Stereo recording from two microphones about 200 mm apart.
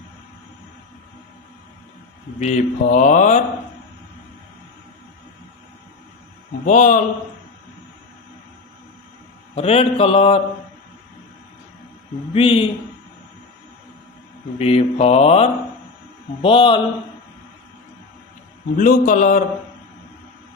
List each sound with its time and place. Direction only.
2.4 s mantra: 35° left (ahead or behind)
6.7 s mantra: 40° left (ahead or behind)
9.6 s mantra: 30° left (ahead or behind)
12.3 s speech: 25° left (ahead or behind)
14.6 s mantra: 30° left (ahead or behind)
16.4 s speech: 25° left (ahead or behind)
18.8 s mantra: 40° left (ahead or behind)